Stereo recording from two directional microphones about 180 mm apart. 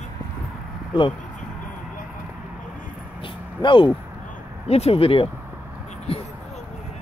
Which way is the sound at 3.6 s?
25° left (ahead or behind).